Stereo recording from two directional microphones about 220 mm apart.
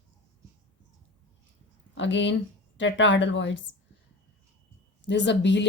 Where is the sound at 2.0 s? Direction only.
55° left (ahead or behind).